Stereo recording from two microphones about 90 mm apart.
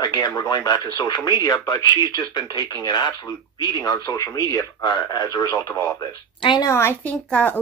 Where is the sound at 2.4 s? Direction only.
50° right (ahead or behind).